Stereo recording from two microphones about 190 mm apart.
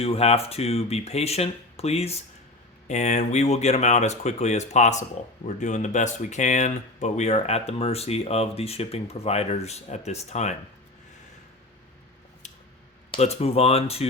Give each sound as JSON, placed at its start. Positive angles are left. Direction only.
{"t": 0.0, "sound": "speech", "side_deg": 30}
{"t": 13.1, "sound": "speech", "side_deg": 35}